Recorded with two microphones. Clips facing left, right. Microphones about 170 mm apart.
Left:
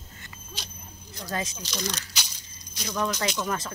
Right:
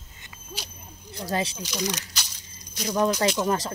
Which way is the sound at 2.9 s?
30° right (ahead or behind).